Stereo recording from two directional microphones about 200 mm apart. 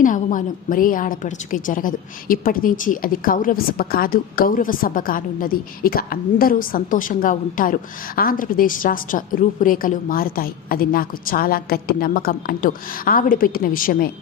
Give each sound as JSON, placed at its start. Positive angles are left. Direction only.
{"t": 0.0, "sound": "a woman's voice", "side_deg": 40}